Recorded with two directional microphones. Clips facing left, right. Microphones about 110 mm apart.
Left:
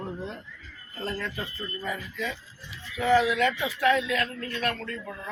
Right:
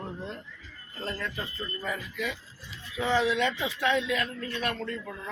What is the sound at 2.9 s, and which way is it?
Speech, 20° right (ahead or behind).